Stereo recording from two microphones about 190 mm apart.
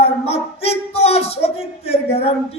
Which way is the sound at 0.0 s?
30° left (ahead or behind).